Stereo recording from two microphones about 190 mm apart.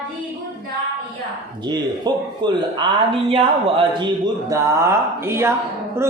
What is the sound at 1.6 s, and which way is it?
Speech, 25° right (ahead or behind).